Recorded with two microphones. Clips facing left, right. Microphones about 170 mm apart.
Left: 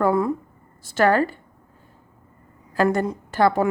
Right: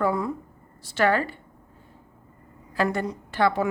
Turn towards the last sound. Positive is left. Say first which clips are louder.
# left 4 dB
turn(degrees=45)  # may be behind; listen again after turning